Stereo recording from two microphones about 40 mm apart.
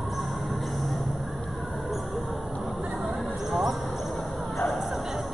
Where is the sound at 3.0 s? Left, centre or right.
Centre.